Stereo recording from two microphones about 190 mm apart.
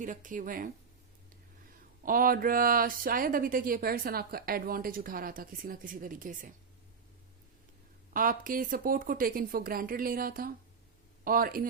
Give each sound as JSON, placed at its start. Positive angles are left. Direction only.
{"t": 0.0, "sound": "speech", "side_deg": -40}
{"t": 2.0, "sound": "speech", "side_deg": -50}
{"t": 8.1, "sound": "speech", "side_deg": -45}